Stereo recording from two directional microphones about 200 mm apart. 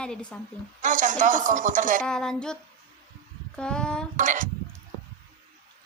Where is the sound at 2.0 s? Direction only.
5° left (ahead or behind).